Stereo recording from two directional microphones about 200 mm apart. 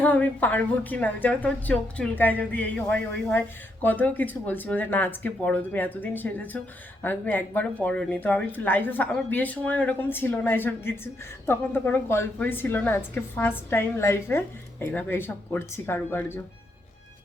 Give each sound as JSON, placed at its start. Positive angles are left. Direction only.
{"t": 0.0, "sound": "a woman's voice", "side_deg": 10}